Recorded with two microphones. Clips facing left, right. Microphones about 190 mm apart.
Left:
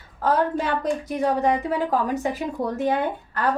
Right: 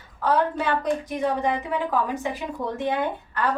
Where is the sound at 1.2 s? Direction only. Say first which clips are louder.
Left 3 dB; 40° left (ahead or behind).